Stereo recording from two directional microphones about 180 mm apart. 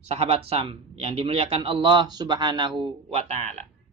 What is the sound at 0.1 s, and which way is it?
A man's voice, 35° right (ahead or behind).